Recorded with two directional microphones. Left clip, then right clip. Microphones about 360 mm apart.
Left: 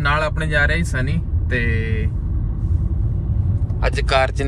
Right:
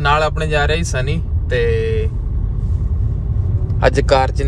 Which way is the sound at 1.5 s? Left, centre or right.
Right.